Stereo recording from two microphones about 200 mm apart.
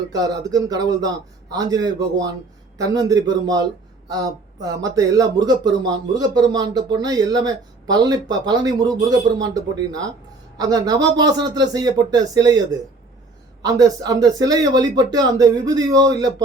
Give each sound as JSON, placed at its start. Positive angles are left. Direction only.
{"t": 0.1, "sound": "speech", "side_deg": -20}